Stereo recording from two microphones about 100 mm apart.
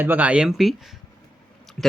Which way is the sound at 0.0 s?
20° right (ahead or behind).